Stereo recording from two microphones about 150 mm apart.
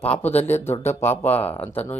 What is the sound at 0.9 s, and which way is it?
Speech, 15° left (ahead or behind).